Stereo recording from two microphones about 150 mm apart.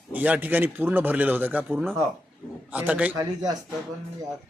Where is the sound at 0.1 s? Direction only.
10° right (ahead or behind).